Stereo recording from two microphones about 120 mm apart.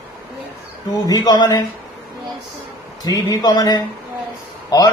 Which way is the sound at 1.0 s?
30° left (ahead or behind).